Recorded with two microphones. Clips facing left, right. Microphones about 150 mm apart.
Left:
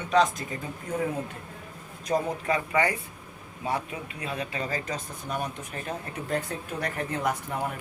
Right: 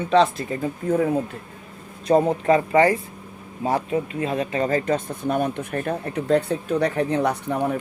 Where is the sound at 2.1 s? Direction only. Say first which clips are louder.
Right 9 dB; 40° right (ahead or behind); by 7.7 s 65° right (ahead or behind).